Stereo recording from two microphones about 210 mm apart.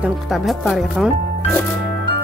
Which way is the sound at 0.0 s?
Centre (ahead or behind).